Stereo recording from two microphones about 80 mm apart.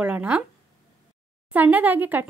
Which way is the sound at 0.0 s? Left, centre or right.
Centre.